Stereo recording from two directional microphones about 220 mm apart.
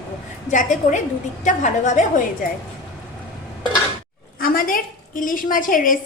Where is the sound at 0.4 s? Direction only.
35° left (ahead or behind).